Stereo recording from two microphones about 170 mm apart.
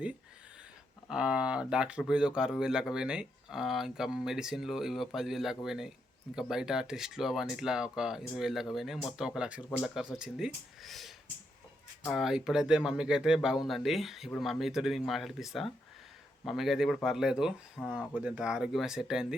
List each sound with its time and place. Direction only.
1.0 s speech: 5° right (ahead or behind)